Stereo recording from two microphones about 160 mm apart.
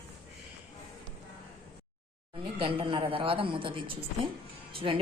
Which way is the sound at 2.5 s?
35° right (ahead or behind).